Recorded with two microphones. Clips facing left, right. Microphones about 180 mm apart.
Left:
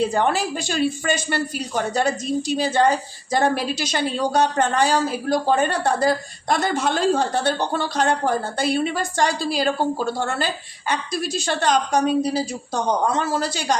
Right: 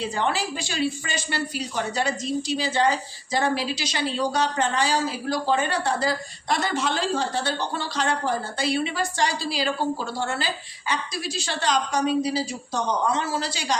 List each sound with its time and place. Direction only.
0.0 s a woman's voice: 50° left (ahead or behind)